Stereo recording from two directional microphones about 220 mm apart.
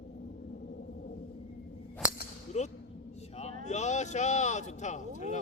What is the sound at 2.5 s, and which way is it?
Speech, 30° left (ahead or behind).